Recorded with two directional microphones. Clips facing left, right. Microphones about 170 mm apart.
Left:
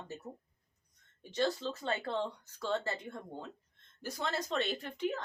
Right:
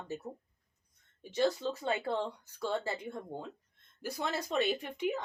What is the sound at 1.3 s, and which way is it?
Speech, 10° right (ahead or behind).